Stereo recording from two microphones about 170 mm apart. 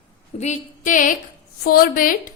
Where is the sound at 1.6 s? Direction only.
60° left (ahead or behind).